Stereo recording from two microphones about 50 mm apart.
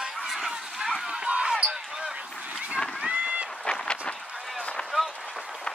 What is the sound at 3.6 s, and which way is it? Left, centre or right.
Goose, centre.